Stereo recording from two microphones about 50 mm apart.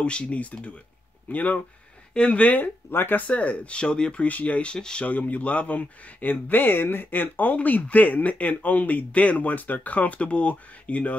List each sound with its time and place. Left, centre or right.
0.0 s speech: left
2.1 s speech: centre
2.4 s speech: left
2.9 s speech: left
3.3 s speech: left
4.7 s speech: centre
5.0 s speech: left